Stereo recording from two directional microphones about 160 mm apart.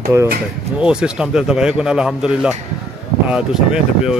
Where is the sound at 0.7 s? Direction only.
5° right (ahead or behind).